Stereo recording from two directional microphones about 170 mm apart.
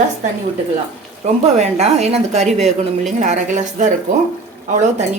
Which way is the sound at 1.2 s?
40° right (ahead or behind).